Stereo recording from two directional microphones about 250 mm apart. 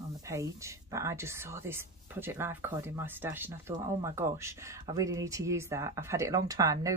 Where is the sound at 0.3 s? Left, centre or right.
Centre.